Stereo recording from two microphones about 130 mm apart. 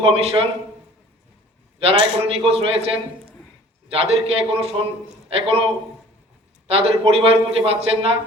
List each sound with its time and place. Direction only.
0.0 s a man's voice: 50° right (ahead or behind)
1.8 s a man's voice: 40° right (ahead or behind)